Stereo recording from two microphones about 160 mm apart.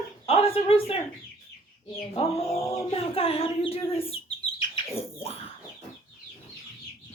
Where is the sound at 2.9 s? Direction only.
35° left (ahead or behind).